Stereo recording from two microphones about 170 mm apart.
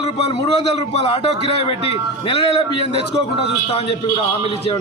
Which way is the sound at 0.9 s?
35° left (ahead or behind).